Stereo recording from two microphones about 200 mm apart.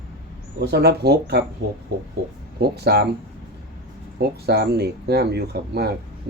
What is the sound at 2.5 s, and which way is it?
Speech, 55° right (ahead or behind).